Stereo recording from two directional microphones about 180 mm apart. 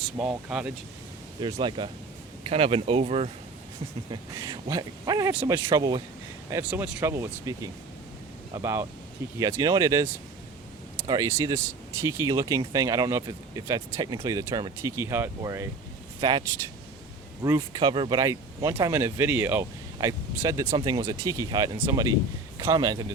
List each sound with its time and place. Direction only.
0.2 s speech: 5° right (ahead or behind)
1.4 s speech: 30° right (ahead or behind)
4.1 s speech: 20° right (ahead or behind)
6.5 s speech: 10° right (ahead or behind)
17.4 s speech: 20° right (ahead or behind)